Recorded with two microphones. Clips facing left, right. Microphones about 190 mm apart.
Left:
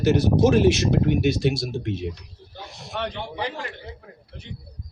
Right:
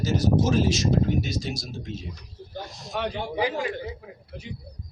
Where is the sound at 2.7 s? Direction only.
65° left (ahead or behind).